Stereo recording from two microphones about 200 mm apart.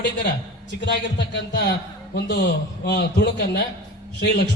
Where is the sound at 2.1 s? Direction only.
55° left (ahead or behind).